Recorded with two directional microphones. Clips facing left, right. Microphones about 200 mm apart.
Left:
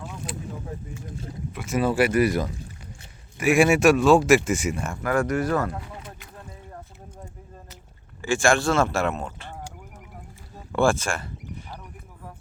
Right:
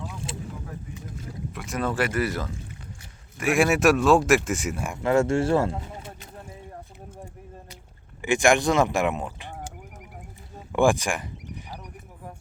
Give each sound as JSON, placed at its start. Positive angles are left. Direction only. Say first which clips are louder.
{"t": 0.3, "sound": "vehicle", "louder": "left 1 dB", "side_deg": -25}
{"t": 1.5, "sound": "speech", "louder": "left 5 dB", "side_deg": 0}
{"t": 3.4, "sound": "speech", "louder": "left 2 dB", "side_deg": 0}
{"t": 5.0, "sound": "speech", "louder": "right 3 dB", "side_deg": -25}
{"t": 8.2, "sound": "speech", "louder": "right 1 dB", "side_deg": -20}
{"t": 10.7, "sound": "a sound", "louder": "right 1 dB", "side_deg": -15}